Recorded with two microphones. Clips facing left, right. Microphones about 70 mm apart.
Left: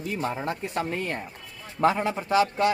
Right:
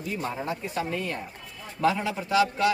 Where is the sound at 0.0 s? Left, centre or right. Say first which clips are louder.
Left 2 dB; left.